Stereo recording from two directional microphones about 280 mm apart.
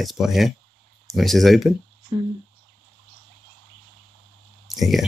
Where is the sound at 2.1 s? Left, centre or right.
Centre.